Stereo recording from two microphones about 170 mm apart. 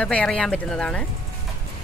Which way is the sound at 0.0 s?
5° left (ahead or behind).